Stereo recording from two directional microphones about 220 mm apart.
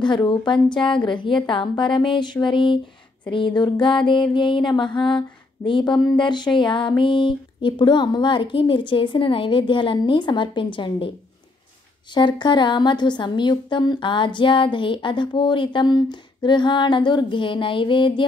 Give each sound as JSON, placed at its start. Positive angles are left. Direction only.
{"t": 0.0, "sound": "a woman's voice", "side_deg": 20}
{"t": 12.1, "sound": "a woman's voice", "side_deg": 20}